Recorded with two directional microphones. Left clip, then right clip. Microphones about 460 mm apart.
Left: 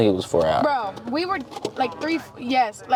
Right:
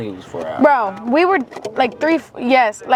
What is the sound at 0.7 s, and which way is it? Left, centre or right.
Speech, right.